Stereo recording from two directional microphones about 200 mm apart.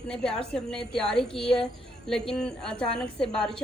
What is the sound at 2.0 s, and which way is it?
A woman's voice, centre (ahead or behind).